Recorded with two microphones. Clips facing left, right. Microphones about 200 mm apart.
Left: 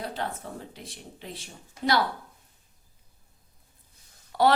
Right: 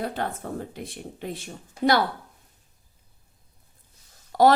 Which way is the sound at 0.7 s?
50° right (ahead or behind).